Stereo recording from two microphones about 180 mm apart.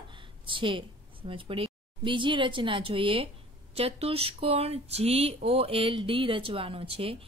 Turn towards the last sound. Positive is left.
turn(degrees=-30)  # may be behind; listen again after turning